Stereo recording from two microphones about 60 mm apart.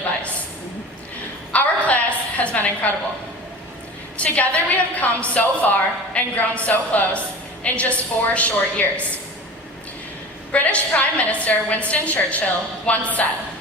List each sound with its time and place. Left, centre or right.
1.5 s a sound: left
4.2 s a woman's voice: left
10.5 s a woman's voice: left